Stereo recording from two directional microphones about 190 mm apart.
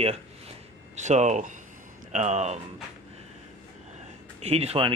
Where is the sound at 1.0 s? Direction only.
40° right (ahead or behind).